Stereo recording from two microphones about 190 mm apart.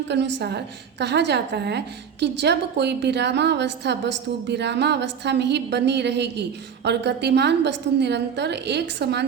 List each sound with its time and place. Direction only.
0.1 s a woman's voice: 65° right (ahead or behind)